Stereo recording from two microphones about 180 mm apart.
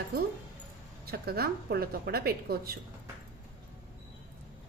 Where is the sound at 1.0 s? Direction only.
60° right (ahead or behind).